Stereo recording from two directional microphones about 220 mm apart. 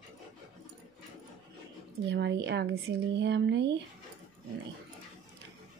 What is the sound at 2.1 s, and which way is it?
Speech, 50° right (ahead or behind).